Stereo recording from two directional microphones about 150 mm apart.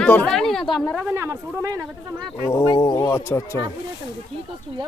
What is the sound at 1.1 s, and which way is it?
Speech, 20° right (ahead or behind).